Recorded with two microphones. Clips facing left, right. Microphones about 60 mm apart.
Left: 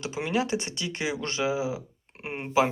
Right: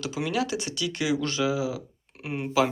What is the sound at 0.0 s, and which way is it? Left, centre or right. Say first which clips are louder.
Speech: even; left.